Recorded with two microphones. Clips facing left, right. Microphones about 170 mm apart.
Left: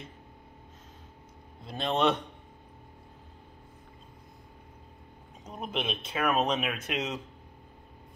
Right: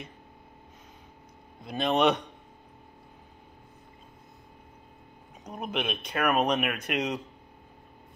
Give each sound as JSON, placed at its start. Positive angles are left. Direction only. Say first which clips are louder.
{"t": 1.6, "sound": "speech", "louder": "right 3 dB", "side_deg": -15}
{"t": 5.4, "sound": "speech", "louder": "right 2 dB", "side_deg": -10}